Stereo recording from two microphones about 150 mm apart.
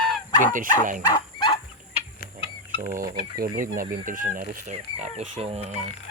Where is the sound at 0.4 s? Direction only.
60° right (ahead or behind).